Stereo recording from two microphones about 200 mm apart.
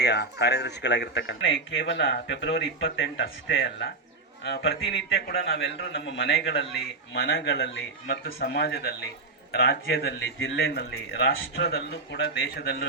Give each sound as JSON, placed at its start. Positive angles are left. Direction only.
{"t": 0.0, "sound": "a man's voice", "side_deg": 55}